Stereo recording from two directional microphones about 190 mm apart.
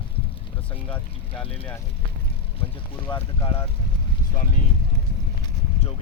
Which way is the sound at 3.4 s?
30° left (ahead or behind).